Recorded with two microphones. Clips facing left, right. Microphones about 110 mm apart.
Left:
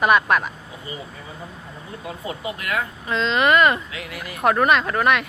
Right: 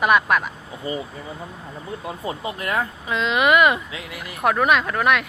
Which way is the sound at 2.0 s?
30° right (ahead or behind).